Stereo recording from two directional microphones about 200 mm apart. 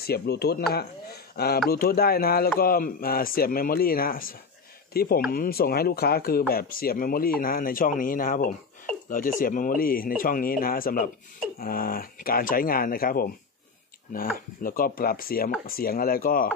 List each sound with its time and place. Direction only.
0.0 s speech: 50° left (ahead or behind)